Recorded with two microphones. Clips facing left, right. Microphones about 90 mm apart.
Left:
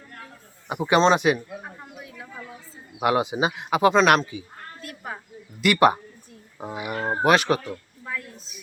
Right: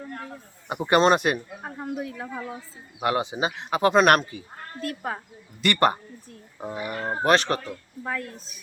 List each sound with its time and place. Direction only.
0.7 s speech: centre (ahead or behind)
1.6 s a sound: 40° right (ahead or behind)
3.0 s speech: 15° left (ahead or behind)
4.3 s speech: centre (ahead or behind)
4.8 s speech: 40° right (ahead or behind)
5.5 s speech: 5° left (ahead or behind)
8.0 s speech: 45° right (ahead or behind)